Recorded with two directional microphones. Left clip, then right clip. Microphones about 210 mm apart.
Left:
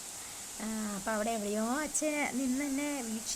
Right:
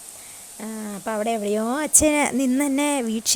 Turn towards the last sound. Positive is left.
turn(degrees=-45)  # may be behind; listen again after turning